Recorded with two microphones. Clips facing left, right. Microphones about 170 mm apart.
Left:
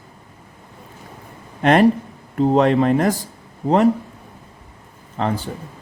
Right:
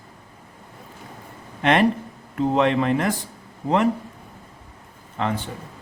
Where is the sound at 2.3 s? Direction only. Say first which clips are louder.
Left 4 dB; 35° left (ahead or behind).